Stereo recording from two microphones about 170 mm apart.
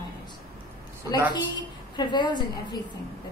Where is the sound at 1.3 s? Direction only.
25° left (ahead or behind).